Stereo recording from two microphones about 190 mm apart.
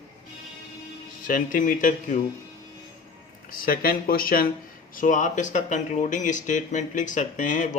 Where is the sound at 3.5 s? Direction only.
50° left (ahead or behind).